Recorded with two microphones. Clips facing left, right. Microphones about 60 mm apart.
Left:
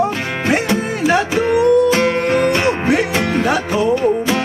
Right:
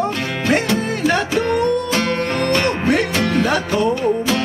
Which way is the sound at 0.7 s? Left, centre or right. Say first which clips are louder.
Left 2 dB; centre.